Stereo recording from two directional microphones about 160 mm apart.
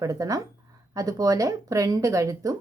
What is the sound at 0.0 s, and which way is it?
A woman's voice, 20° right (ahead or behind).